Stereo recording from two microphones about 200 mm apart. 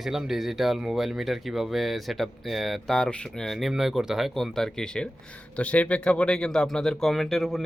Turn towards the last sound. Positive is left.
turn(degrees=0)  # may be behind; listen again after turning